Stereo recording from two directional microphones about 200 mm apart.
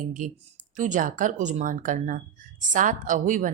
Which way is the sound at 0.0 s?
40° right (ahead or behind).